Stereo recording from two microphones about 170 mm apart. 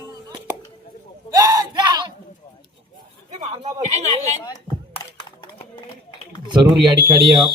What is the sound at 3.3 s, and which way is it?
Speech, 40° right (ahead or behind).